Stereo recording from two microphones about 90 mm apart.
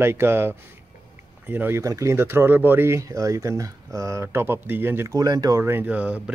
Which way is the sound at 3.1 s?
35° right (ahead or behind).